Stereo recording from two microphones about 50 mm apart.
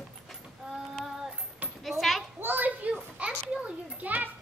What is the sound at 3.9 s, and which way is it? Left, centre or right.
Children playing, right.